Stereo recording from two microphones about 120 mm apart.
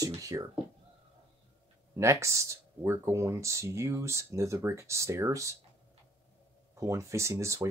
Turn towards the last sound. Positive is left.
turn(degrees=-25)  # may be behind; listen again after turning